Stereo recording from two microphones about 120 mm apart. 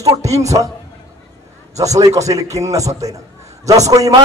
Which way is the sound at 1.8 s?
30° right (ahead or behind).